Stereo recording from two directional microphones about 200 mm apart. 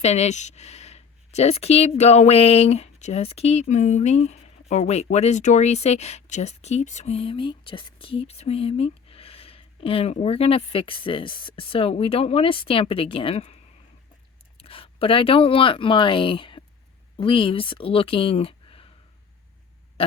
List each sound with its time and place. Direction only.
0.0 s speech: 35° left (ahead or behind)
14.6 s speech: 25° left (ahead or behind)